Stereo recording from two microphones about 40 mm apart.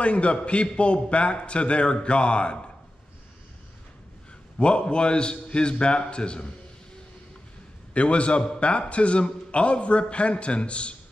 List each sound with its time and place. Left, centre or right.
0.0 s a man's voice: left
4.6 s a man's voice: left
7.9 s a man's voice: left